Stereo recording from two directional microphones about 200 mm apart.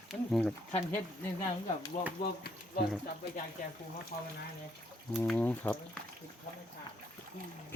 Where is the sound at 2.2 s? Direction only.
50° left (ahead or behind).